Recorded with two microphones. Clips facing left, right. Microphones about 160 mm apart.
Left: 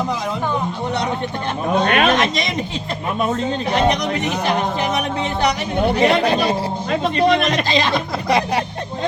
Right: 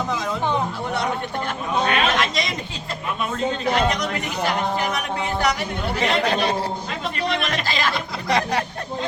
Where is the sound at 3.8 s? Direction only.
20° left (ahead or behind).